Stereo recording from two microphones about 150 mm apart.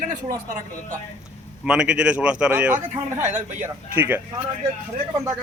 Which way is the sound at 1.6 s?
5° right (ahead or behind).